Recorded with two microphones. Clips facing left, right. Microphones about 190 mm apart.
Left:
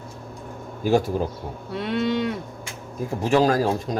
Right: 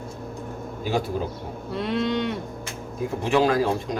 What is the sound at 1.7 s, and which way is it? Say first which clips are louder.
Speech: left 1 dB; centre (ahead or behind).